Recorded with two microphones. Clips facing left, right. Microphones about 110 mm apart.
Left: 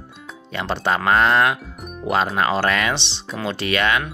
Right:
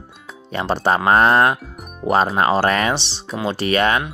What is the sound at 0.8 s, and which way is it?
Speech, 40° right (ahead or behind).